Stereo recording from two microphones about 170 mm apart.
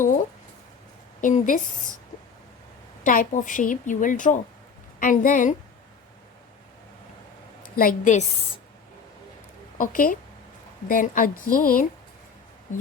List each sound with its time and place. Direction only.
1.2 s a woman's voice: 50° left (ahead or behind)
3.0 s a woman's voice: 50° left (ahead or behind)
7.8 s a woman's voice: 50° left (ahead or behind)
9.7 s a woman's voice: 55° left (ahead or behind)